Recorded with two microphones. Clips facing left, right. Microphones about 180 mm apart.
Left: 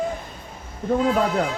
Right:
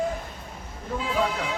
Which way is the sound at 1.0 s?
45° left (ahead or behind).